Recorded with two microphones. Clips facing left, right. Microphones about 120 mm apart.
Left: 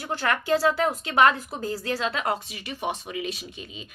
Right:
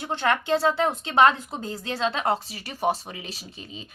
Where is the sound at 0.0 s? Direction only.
25° right (ahead or behind).